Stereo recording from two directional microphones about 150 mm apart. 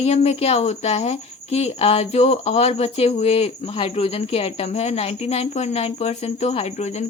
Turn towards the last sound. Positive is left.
turn(degrees=45)  # may be behind; listen again after turning